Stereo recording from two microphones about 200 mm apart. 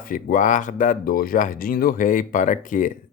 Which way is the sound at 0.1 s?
40° left (ahead or behind).